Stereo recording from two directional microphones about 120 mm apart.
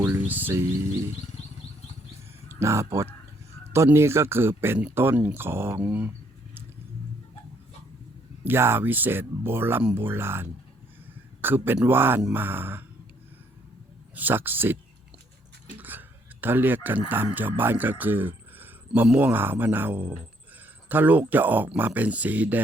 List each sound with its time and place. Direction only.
0.0 s music: 15° right (ahead or behind)
2.6 s speech: 25° right (ahead or behind)
8.4 s speech: 20° right (ahead or behind)
14.2 s speech: 15° right (ahead or behind)
15.7 s a sound: 15° right (ahead or behind)
17.1 s speech: 15° right (ahead or behind)